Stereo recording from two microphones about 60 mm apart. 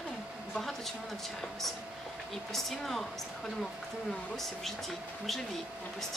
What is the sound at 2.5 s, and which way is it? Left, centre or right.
Speech, centre.